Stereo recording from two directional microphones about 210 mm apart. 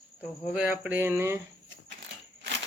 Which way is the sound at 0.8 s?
10° right (ahead or behind).